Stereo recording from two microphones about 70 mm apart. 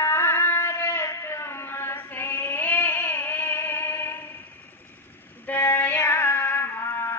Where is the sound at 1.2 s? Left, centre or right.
Left.